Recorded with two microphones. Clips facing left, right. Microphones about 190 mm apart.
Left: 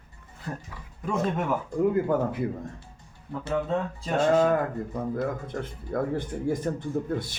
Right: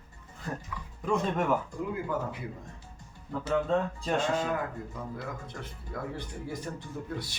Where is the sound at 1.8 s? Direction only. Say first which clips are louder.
Left 9 dB; 50° left (ahead or behind).